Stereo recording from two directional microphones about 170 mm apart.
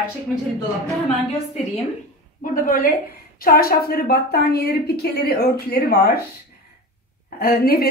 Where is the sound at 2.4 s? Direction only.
55° left (ahead or behind).